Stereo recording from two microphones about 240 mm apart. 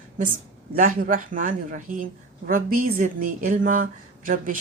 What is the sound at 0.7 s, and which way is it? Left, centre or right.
A woman's voice, right.